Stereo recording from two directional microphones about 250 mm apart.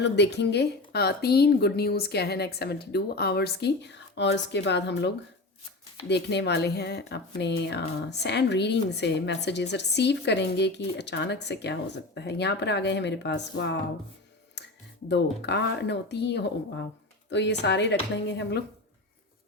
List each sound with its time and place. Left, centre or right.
0.0 s a woman's voice: left
15.1 s speech: left